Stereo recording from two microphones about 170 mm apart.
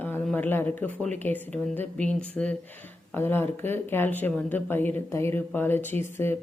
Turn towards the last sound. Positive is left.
turn(degrees=15)  # may be behind; listen again after turning